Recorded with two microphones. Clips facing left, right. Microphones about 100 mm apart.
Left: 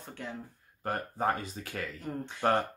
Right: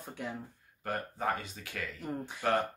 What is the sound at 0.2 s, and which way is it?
Speech, 10° right (ahead or behind).